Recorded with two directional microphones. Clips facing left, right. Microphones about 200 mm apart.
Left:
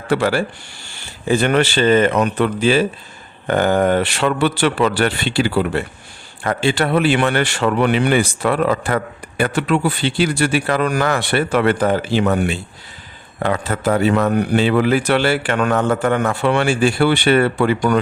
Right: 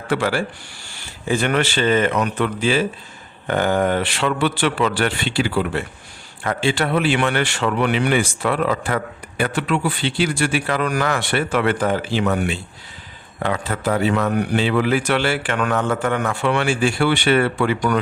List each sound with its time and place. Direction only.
0.1 s a man's voice: 35° left (ahead or behind)